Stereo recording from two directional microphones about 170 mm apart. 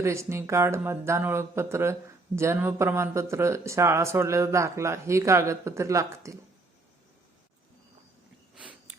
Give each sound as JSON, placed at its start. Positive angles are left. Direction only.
{"t": 0.0, "sound": "speech", "side_deg": -15}